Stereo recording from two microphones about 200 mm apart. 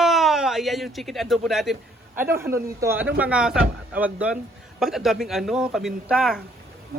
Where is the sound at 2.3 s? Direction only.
15° right (ahead or behind).